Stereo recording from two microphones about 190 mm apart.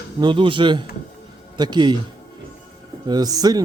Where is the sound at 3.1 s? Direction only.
20° right (ahead or behind).